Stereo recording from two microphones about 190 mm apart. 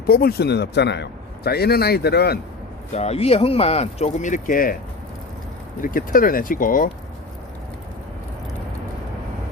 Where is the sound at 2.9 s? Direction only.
35° left (ahead or behind).